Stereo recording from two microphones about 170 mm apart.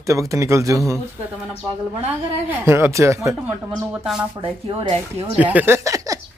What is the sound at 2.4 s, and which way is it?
Speech, 15° right (ahead or behind).